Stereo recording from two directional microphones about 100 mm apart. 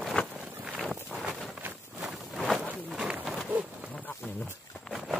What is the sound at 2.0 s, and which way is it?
Walk, centre (ahead or behind).